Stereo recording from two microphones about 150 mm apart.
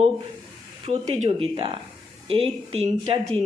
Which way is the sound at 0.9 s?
40° right (ahead or behind).